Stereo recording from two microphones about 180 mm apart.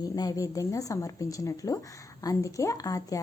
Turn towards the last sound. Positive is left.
turn(degrees=20)  # may be behind; listen again after turning